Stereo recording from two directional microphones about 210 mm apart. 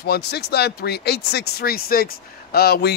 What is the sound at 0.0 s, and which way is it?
Speech, 50° left (ahead or behind).